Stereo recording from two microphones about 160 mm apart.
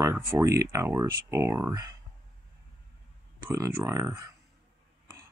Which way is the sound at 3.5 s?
20° right (ahead or behind).